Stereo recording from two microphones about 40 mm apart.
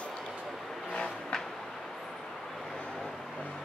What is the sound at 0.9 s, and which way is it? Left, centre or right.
Vehicle, centre.